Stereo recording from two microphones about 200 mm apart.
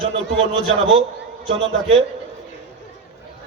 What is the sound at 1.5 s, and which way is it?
Speech, 30° right (ahead or behind).